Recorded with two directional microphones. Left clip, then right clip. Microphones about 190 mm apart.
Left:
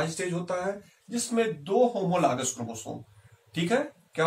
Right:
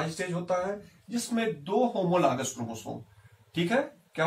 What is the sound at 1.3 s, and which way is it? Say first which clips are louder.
Speech: left 3 dB; 20° left (ahead or behind).